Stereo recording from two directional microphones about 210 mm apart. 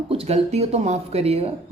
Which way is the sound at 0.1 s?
30° right (ahead or behind).